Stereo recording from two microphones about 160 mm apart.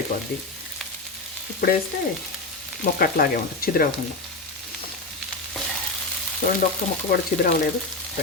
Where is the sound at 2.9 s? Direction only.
65° left (ahead or behind).